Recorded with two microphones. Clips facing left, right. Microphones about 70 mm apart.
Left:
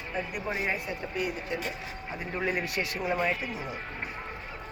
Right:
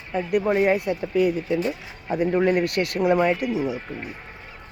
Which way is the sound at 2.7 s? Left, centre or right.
Right.